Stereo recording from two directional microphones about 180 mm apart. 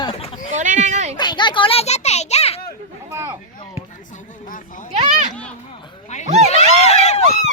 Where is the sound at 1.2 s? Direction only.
25° left (ahead or behind).